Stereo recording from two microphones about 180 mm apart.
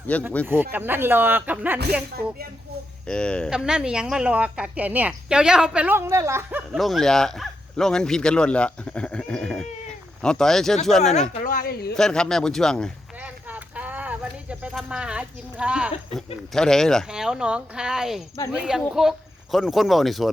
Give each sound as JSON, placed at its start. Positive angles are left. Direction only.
{"t": 0.1, "sound": "speech", "side_deg": 5}
{"t": 0.4, "sound": "speech", "side_deg": -10}
{"t": 3.1, "sound": "speech", "side_deg": 5}
{"t": 6.7, "sound": "speech", "side_deg": 0}
{"t": 11.4, "sound": "speech", "side_deg": 55}
{"t": 11.9, "sound": "speech", "side_deg": 5}
{"t": 13.2, "sound": "a sound", "side_deg": -10}
{"t": 16.1, "sound": "speech", "side_deg": 5}